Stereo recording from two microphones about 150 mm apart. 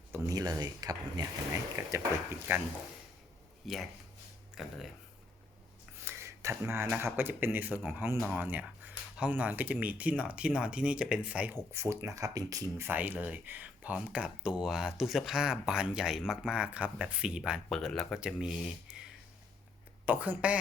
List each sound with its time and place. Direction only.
0.1 s speech: 25° right (ahead or behind)
3.6 s speech: centre (ahead or behind)
6.0 s speech: 15° right (ahead or behind)
20.1 s speech: 10° right (ahead or behind)